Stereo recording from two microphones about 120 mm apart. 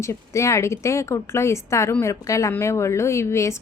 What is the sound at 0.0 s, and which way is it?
A woman's voice, 25° left (ahead or behind).